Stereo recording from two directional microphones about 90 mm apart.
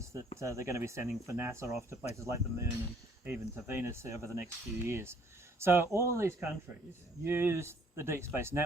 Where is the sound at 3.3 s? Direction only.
25° right (ahead or behind).